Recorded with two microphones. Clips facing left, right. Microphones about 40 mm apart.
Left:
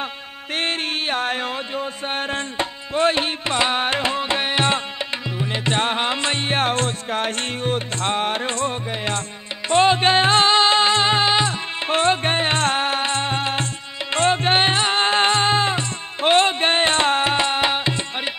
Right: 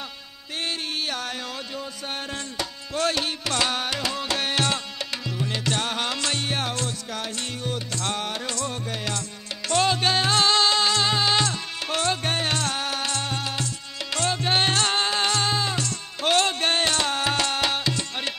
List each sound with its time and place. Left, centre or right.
0.6 s mantra: left
5.4 s music: left